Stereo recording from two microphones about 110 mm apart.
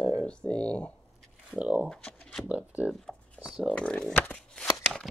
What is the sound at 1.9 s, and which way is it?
Shuffling cards, 10° left (ahead or behind).